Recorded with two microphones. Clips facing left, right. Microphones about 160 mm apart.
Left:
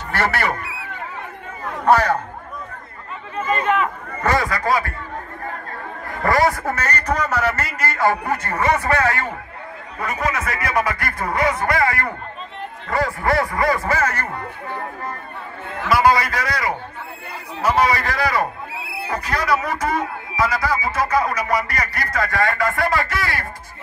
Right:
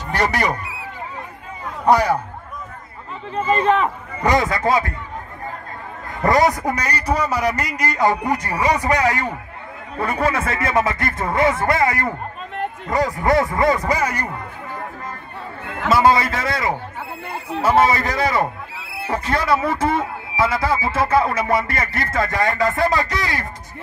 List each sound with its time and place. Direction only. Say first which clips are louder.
0.1 s a man's voice: right 1 dB; 15° right (ahead or behind)
1.9 s a man's voice: even; 15° right (ahead or behind)
3.3 s speech: right 3 dB; 30° right (ahead or behind)
4.2 s speech: right 2 dB; 20° right (ahead or behind)
6.2 s a man's voice: right 2 dB; 20° right (ahead or behind)
9.9 s speech: right 3 dB; 30° right (ahead or behind); by 14.3 s 15° right (ahead or behind)
15.9 s speech: right 1 dB; 25° right (ahead or behind)